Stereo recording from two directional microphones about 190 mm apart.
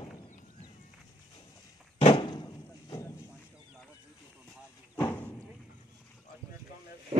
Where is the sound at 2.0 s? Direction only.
25° left (ahead or behind).